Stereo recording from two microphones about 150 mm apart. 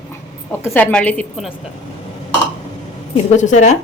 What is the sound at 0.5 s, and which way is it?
Speech, 15° left (ahead or behind).